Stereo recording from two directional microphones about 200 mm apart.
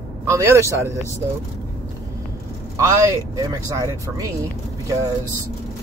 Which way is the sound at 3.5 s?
15° right (ahead or behind).